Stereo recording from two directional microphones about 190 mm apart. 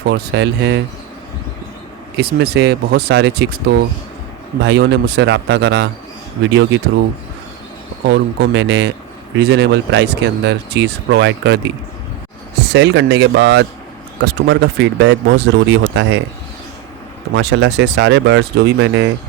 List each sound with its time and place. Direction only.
0.0 s speech: 60° right (ahead or behind)
2.1 s speech: 60° right (ahead or behind)
8.0 s speech: 65° right (ahead or behind)
17.3 s speech: 65° right (ahead or behind)